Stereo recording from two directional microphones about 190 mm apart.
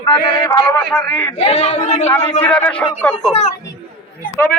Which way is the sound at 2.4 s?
5° left (ahead or behind).